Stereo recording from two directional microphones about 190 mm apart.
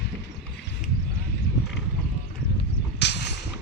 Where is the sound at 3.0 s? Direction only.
65° left (ahead or behind).